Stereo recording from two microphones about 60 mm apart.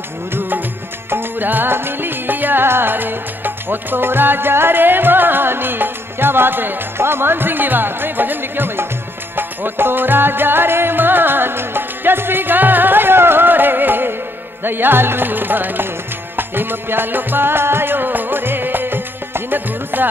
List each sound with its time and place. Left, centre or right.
0.3 s music: right